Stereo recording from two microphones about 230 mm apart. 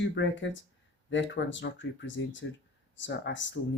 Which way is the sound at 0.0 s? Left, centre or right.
Left.